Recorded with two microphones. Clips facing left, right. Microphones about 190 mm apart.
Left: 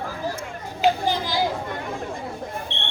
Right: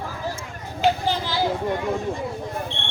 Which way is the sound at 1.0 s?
15° left (ahead or behind).